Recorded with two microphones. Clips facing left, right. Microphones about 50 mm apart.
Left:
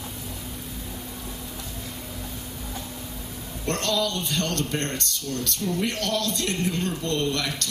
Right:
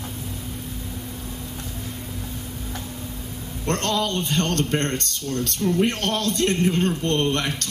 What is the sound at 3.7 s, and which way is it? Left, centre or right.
Speech, right.